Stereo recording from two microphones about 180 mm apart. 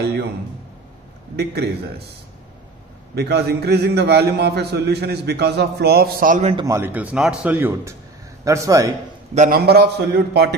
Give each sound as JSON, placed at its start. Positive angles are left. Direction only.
{"t": 1.3, "sound": "a man's voice", "side_deg": -65}
{"t": 3.2, "sound": "a man's voice", "side_deg": -65}
{"t": 6.5, "sound": "speech", "side_deg": -20}
{"t": 9.3, "sound": "a man's voice", "side_deg": -40}
{"t": 9.7, "sound": "a man's voice", "side_deg": -65}